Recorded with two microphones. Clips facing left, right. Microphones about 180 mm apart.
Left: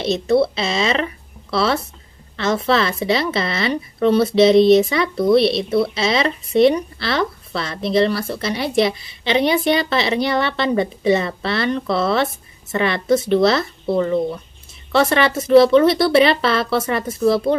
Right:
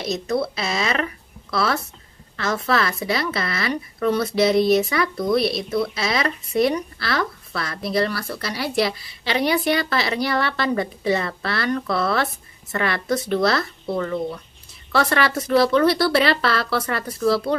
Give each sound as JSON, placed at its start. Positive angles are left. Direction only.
{"t": 0.0, "sound": "speech", "side_deg": 30}